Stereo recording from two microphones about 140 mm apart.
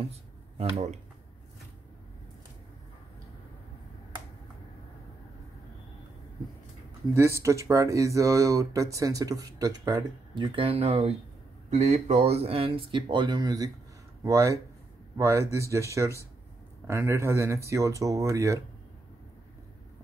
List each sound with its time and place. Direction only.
0.6 s speech: 50° right (ahead or behind)
7.2 s speech: 20° right (ahead or behind)